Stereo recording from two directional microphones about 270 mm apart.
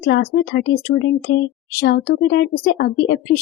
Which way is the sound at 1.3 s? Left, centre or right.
Left.